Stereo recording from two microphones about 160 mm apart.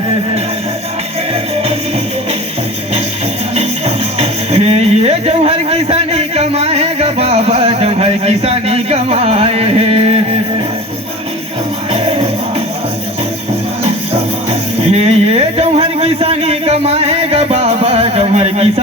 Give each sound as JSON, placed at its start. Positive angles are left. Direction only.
{"t": 3.5, "sound": "music", "side_deg": -40}
{"t": 11.9, "sound": "music", "side_deg": -35}
{"t": 14.8, "sound": "a sound", "side_deg": -40}